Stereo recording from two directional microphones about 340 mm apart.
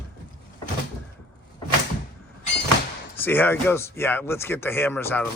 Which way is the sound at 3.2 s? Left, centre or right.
Centre.